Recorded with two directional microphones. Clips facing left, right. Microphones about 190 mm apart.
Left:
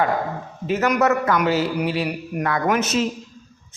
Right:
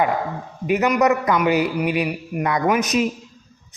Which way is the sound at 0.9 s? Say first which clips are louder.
Right 1 dB; 15° right (ahead or behind).